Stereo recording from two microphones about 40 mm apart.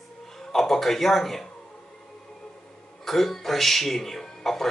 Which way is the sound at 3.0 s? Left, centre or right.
Centre.